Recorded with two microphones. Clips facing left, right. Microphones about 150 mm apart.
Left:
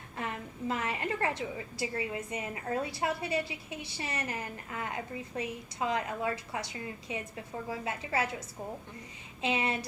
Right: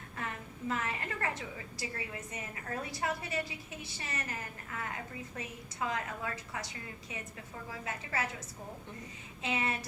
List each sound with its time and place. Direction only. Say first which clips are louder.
0.2 s a sound: left 4 dB; 20° left (ahead or behind)
1.8 s a woman's voice: left 7 dB; 20° left (ahead or behind)
9.4 s a woman's voice: left 4 dB; 20° left (ahead or behind)